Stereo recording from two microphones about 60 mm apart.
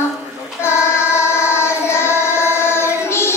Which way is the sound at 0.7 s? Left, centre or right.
Left.